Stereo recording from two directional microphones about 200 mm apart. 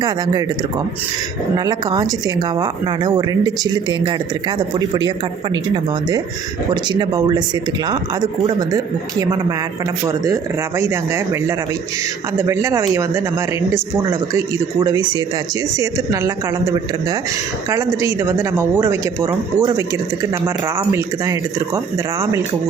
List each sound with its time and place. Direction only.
1.5 s speech: 20° right (ahead or behind)
6.8 s speech: 20° right (ahead or behind)
10.8 s speech: 15° right (ahead or behind)
15.8 s speech: 15° right (ahead or behind)